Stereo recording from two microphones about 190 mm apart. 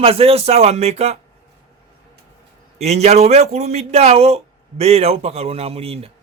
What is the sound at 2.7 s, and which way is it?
A man's voice, 35° right (ahead or behind).